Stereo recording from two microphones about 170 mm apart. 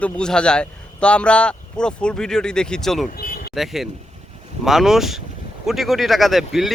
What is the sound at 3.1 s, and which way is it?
Vehicle, 60° left (ahead or behind).